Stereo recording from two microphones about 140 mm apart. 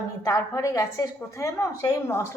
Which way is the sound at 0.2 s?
20° left (ahead or behind).